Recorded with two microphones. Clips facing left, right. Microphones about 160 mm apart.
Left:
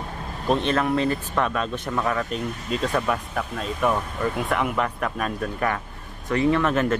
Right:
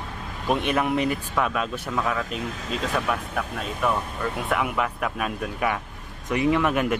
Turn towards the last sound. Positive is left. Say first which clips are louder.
# left 1 dB
turn(degrees=-15)  # may be behind; listen again after turning